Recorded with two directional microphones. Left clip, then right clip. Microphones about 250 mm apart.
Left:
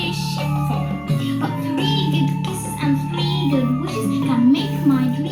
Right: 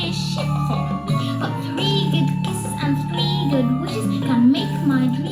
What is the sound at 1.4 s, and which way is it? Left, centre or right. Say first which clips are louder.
Music: left 2 dB; right.